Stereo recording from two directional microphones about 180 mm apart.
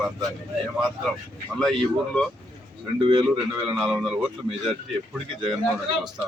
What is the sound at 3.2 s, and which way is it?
Speech, 5° right (ahead or behind).